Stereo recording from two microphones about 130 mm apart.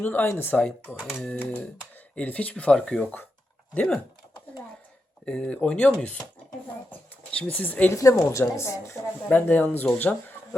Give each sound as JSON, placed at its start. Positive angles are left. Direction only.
{"t": 0.0, "sound": "speech", "side_deg": 15}
{"t": 2.1, "sound": "speech", "side_deg": 10}
{"t": 5.2, "sound": "speech", "side_deg": 10}
{"t": 6.9, "sound": "speech", "side_deg": 10}
{"t": 7.9, "sound": "speech", "side_deg": 25}